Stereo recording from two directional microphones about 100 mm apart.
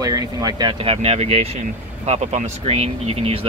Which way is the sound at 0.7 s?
65° right (ahead or behind).